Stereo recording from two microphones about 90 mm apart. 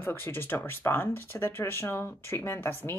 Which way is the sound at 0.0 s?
25° left (ahead or behind).